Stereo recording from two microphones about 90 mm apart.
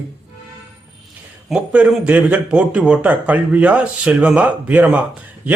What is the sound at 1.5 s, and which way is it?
A man's voice, 15° right (ahead or behind).